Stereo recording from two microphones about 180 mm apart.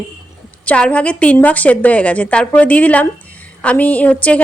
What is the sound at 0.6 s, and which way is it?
A woman's voice, 5° left (ahead or behind).